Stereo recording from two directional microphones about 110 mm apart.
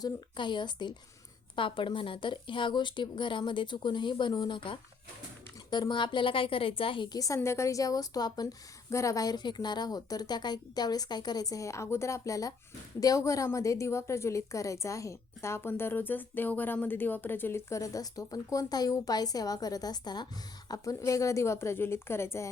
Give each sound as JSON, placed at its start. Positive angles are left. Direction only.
{"t": 0.0, "sound": "a woman's voice", "side_deg": 45}
{"t": 7.2, "sound": "a woman's voice", "side_deg": 30}